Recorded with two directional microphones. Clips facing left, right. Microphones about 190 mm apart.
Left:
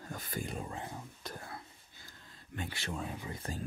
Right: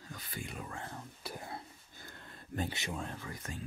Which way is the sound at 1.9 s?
60° right (ahead or behind).